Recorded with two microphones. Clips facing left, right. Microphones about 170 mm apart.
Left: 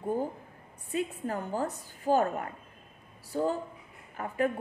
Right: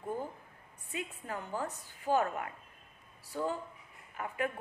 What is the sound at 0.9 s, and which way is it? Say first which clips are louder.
A woman's voice: left 8 dB; 40° left (ahead or behind).